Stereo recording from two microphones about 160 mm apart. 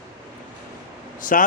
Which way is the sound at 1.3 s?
60° left (ahead or behind).